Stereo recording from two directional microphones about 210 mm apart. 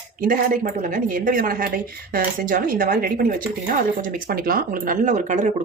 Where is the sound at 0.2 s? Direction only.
40° right (ahead or behind).